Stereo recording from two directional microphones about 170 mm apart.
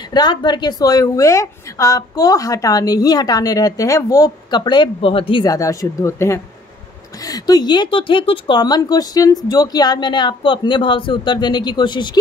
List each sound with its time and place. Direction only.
0.1 s a woman's voice: 25° left (ahead or behind)